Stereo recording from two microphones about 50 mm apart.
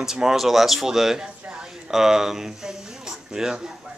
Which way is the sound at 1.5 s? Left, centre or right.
Centre.